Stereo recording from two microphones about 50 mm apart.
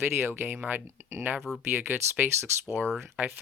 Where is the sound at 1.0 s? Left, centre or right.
Right.